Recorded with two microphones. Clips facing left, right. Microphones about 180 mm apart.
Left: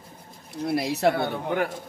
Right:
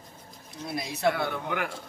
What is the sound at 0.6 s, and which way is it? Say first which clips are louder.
Speech: left 8 dB; 65° left (ahead or behind).